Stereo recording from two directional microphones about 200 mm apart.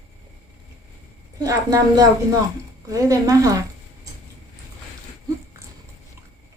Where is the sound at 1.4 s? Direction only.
15° right (ahead or behind).